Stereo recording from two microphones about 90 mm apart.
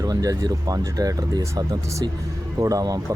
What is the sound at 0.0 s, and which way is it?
Speech, 40° right (ahead or behind).